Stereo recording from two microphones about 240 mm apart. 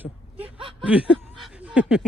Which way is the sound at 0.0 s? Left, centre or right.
Centre.